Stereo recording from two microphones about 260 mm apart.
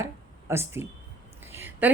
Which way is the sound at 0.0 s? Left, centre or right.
Centre.